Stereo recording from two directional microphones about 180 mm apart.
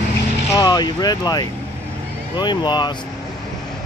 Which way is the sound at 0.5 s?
25° left (ahead or behind).